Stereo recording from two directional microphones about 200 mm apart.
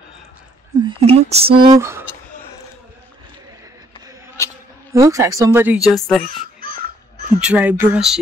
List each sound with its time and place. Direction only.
0.8 s speech: 30° right (ahead or behind); by 2.0 s 15° right (ahead or behind)
4.9 s speech: 15° right (ahead or behind); by 6.2 s centre (ahead or behind)
7.3 s speech: 5° right (ahead or behind)